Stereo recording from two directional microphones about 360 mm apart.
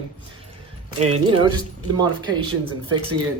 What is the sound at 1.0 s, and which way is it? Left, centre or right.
Speech, centre.